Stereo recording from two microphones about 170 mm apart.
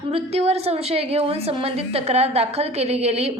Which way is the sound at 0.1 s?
35° right (ahead or behind).